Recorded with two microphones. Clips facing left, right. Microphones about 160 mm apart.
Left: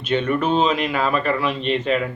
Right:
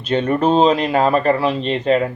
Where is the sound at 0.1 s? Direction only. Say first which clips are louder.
Right 4 dB; 35° right (ahead or behind).